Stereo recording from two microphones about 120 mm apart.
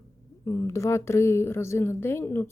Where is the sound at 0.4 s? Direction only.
25° left (ahead or behind).